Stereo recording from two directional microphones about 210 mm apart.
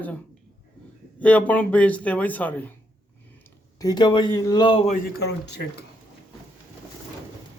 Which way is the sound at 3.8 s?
20° left (ahead or behind).